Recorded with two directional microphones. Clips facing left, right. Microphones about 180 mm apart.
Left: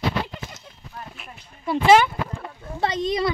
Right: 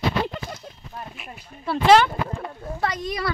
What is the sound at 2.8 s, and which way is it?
Speech, 25° left (ahead or behind).